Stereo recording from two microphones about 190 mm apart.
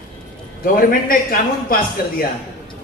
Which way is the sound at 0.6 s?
50° left (ahead or behind).